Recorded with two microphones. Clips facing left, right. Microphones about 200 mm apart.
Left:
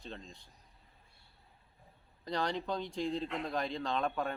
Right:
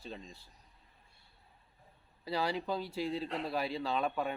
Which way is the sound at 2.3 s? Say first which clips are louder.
Right 1 dB; 5° right (ahead or behind).